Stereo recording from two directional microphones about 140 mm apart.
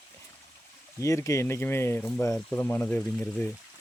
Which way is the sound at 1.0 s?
20° left (ahead or behind).